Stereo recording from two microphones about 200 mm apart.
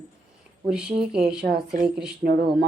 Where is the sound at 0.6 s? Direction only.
5° right (ahead or behind).